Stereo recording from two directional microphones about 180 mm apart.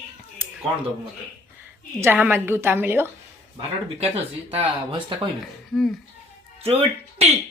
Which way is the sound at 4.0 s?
35° right (ahead or behind).